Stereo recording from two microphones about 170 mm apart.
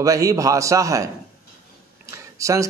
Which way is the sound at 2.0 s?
15° right (ahead or behind).